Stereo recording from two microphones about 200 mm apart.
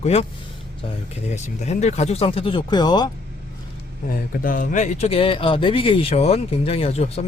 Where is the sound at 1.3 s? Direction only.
35° left (ahead or behind).